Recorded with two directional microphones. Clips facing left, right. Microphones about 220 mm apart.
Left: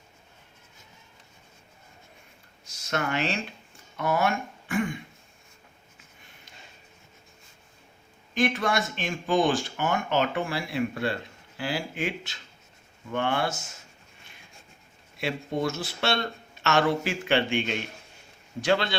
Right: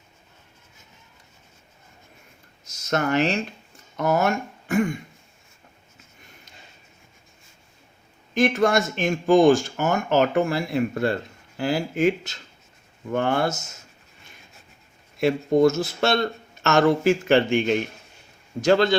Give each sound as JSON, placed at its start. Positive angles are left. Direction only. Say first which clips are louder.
{"t": 2.6, "sound": "speech", "louder": "right 6 dB", "side_deg": -40}
{"t": 8.4, "sound": "speech", "louder": "right 6 dB", "side_deg": -45}
{"t": 15.2, "sound": "speech", "louder": "right 11 dB", "side_deg": -45}